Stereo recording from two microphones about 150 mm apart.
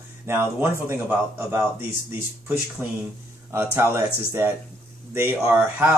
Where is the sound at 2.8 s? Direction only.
15° right (ahead or behind).